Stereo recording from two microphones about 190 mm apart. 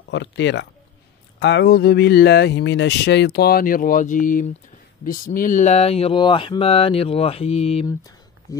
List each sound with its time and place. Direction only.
0.1 s speech: 70° left (ahead or behind); by 7.8 s 30° left (ahead or behind)